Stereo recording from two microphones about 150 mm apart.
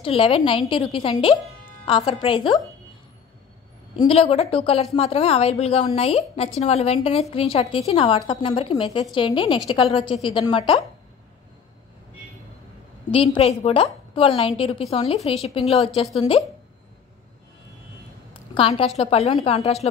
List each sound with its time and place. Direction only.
0.0 s a woman's voice: 40° left (ahead or behind)
3.9 s a woman's voice: 35° left (ahead or behind)
13.1 s a woman's voice: 40° left (ahead or behind)
18.3 s a sound: 35° left (ahead or behind)
18.9 s speech: 45° left (ahead or behind)